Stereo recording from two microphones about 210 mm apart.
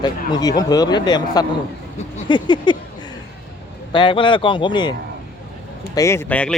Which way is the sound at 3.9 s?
25° left (ahead or behind).